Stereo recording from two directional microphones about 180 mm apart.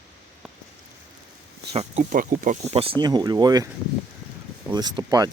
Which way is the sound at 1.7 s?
35° right (ahead or behind).